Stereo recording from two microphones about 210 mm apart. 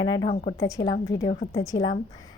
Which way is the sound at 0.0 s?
20° left (ahead or behind).